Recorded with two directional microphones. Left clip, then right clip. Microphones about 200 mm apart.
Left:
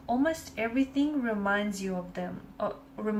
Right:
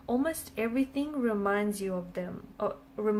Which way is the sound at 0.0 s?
50° right (ahead or behind).